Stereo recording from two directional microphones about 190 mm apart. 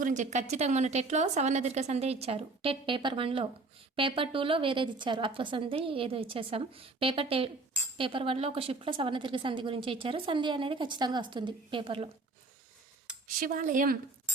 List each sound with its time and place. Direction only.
0.0 s a woman's voice: 40° right (ahead or behind)
13.4 s speech: 45° right (ahead or behind)